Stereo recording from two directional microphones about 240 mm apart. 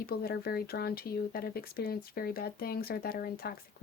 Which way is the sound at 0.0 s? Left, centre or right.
Left.